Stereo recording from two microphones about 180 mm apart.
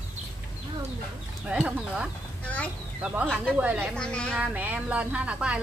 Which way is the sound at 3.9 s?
5° left (ahead or behind).